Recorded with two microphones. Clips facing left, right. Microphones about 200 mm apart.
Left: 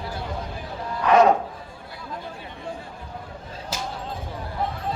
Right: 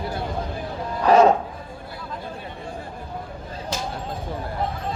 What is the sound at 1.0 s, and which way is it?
Music, 35° right (ahead or behind).